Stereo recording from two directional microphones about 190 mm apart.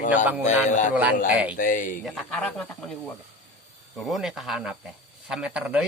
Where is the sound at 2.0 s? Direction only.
5° left (ahead or behind).